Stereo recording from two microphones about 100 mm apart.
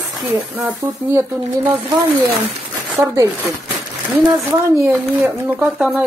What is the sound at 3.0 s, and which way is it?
Speech, 30° right (ahead or behind).